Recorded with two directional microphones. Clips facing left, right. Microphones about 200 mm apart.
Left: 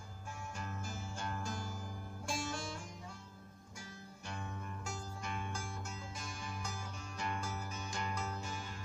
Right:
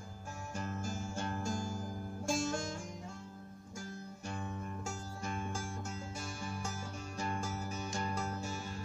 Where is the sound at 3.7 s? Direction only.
45° right (ahead or behind).